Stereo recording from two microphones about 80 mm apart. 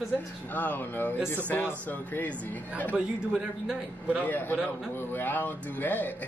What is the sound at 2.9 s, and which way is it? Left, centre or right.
Speech, centre.